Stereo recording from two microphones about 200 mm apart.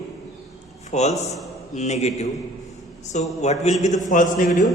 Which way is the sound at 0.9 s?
35° left (ahead or behind).